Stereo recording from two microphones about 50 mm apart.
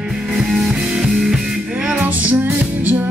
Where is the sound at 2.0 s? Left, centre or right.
Right.